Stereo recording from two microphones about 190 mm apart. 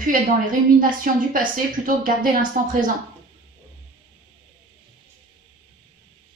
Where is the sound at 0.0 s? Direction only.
45° right (ahead or behind).